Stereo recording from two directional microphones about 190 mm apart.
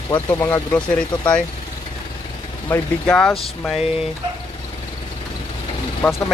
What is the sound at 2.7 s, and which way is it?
Speech, 5° left (ahead or behind).